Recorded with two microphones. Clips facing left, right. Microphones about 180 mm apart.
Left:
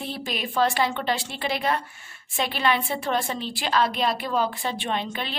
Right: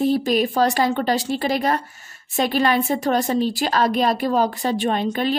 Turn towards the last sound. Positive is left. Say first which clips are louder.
# right 8 dB
turn(degrees=-45)  # may be behind; listen again after turning